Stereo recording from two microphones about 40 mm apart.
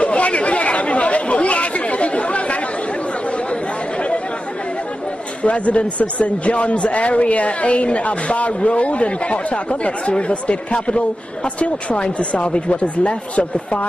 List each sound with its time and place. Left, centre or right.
0.0 s chatter: left
5.4 s a man's voice: left